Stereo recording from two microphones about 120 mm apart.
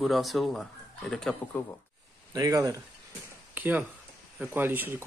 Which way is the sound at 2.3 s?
30° right (ahead or behind).